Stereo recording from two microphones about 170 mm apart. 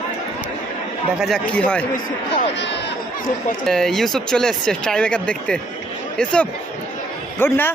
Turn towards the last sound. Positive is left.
turn(degrees=15)  # may be behind; listen again after turning